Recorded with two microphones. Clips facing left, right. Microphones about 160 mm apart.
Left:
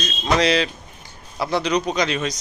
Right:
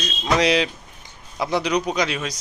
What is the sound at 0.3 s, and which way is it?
Speech, 15° right (ahead or behind).